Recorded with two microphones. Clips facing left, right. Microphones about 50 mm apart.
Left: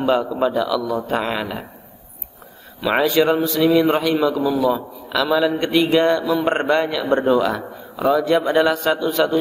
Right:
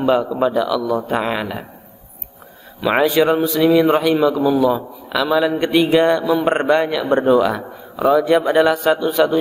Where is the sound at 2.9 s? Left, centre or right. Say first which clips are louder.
Right 2 dB; centre.